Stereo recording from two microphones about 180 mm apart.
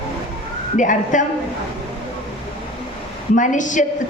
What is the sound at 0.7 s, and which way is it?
Speech, 45° left (ahead or behind).